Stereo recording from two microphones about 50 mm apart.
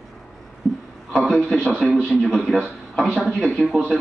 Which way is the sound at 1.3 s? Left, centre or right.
Centre.